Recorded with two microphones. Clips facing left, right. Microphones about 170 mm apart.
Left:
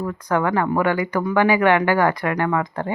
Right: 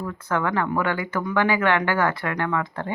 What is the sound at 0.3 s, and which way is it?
Speech, 15° left (ahead or behind).